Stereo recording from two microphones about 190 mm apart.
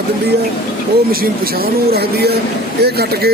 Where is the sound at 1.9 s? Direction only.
55° right (ahead or behind).